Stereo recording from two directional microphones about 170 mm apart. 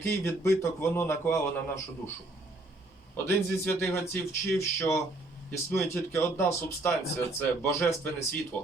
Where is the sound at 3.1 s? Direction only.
10° left (ahead or behind).